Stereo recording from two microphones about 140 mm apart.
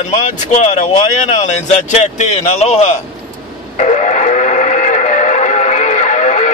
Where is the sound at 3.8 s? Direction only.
60° left (ahead or behind).